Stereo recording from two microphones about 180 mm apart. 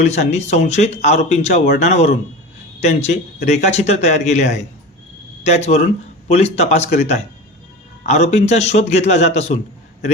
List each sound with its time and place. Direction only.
0.0 s speech: 40° left (ahead or behind)